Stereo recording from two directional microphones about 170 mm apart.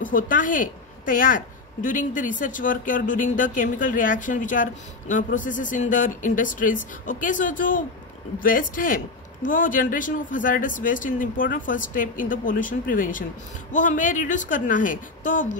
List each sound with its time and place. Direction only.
0.0 s a woman's voice: 50° left (ahead or behind)